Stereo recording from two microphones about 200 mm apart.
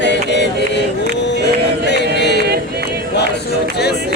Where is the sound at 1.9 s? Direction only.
60° left (ahead or behind).